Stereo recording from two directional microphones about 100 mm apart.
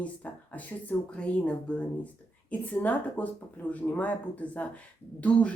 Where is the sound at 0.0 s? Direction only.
15° left (ahead or behind).